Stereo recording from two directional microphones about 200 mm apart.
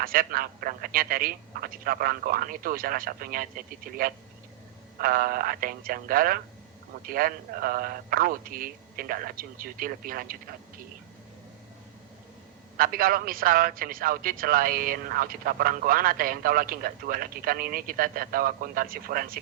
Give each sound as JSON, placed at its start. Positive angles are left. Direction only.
{"t": 0.0, "sound": "a man's voice", "side_deg": -45}
{"t": 12.7, "sound": "a man's voice", "side_deg": -45}